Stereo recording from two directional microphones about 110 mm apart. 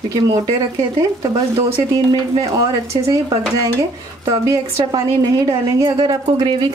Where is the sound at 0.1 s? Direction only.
40° right (ahead or behind).